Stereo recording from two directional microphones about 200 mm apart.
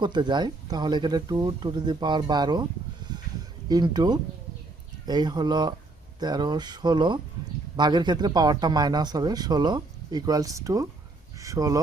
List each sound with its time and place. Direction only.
0.0 s speech: 20° right (ahead or behind)
3.1 s a sound: 20° right (ahead or behind)
3.7 s speech: 20° right (ahead or behind)